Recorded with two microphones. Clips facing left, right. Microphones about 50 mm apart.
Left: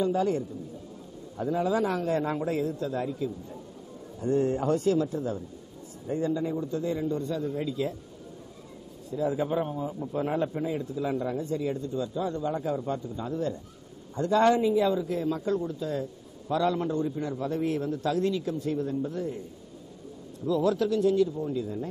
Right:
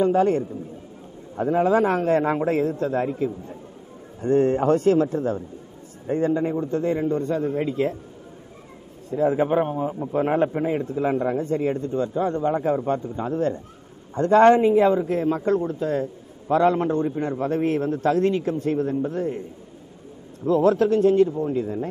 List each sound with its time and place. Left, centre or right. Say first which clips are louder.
0.0 s a man's voice: right 7 dB; right
9.1 s a man's voice: right 7 dB; right
20.4 s a man's voice: right 7 dB; right